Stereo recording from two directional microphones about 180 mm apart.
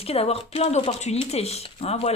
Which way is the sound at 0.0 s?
35° left (ahead or behind).